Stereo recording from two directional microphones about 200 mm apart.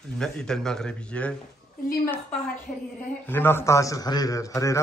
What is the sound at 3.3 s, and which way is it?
A man's voice, 10° left (ahead or behind).